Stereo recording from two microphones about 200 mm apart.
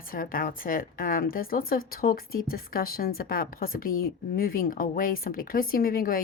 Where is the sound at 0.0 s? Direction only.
45° left (ahead or behind).